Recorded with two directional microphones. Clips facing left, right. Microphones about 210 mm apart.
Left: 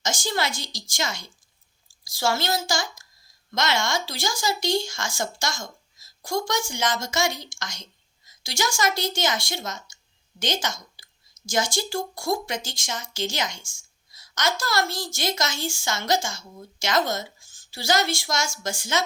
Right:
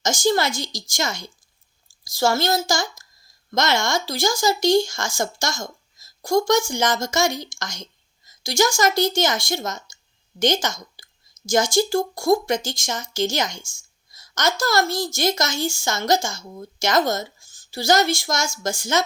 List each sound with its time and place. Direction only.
0.0 s a woman's voice: 40° right (ahead or behind)